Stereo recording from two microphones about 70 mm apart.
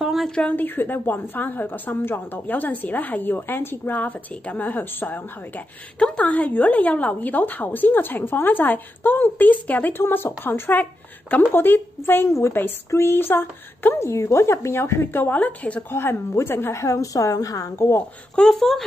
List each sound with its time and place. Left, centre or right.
0.0 s a sound: centre
0.3 s a woman's voice: centre
0.6 s a woman's voice: left
5.9 s a woman's voice: centre; by 15.2 s left
15.2 s a woman's voice: left
15.9 s a woman's voice: left
18.3 s speech: centre